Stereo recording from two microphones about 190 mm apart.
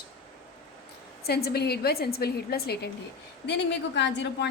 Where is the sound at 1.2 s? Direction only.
55° left (ahead or behind).